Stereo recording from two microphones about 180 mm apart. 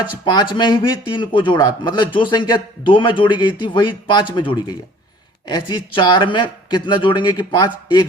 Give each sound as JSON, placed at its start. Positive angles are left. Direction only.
{"t": 0.5, "sound": "speech", "side_deg": 25}